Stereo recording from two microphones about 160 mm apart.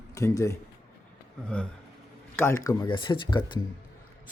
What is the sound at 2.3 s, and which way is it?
Speech, 15° left (ahead or behind).